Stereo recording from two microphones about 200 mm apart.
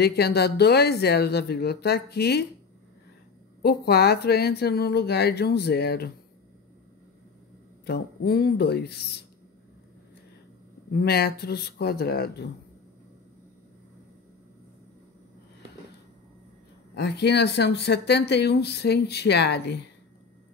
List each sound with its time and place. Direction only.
0.0 s speech: 55° left (ahead or behind)
3.6 s speech: 55° left (ahead or behind)
7.8 s speech: 50° left (ahead or behind)
10.9 s speech: 50° left (ahead or behind)
16.9 s speech: 55° left (ahead or behind)